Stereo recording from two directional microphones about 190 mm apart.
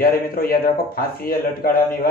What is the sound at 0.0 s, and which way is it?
A man's voice, 50° left (ahead or behind).